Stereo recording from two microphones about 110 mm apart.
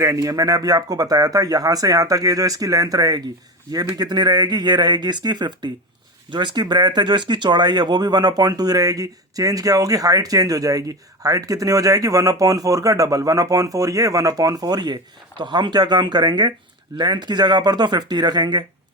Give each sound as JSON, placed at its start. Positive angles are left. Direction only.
{"t": 0.2, "sound": "speech", "side_deg": -35}